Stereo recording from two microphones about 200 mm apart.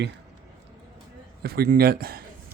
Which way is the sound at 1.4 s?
50° right (ahead or behind).